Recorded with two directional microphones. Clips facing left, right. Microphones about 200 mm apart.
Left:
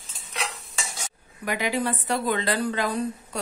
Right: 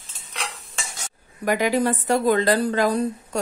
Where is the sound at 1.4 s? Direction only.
45° right (ahead or behind).